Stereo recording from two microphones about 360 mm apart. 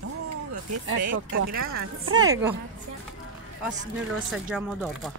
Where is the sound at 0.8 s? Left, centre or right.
Right.